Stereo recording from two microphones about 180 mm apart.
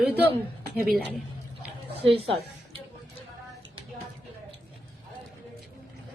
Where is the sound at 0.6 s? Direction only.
55° right (ahead or behind).